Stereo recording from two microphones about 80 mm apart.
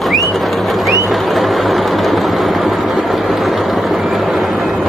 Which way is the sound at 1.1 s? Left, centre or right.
Centre.